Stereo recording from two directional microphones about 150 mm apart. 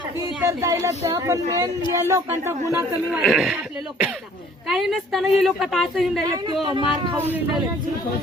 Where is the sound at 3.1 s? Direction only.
Centre (ahead or behind).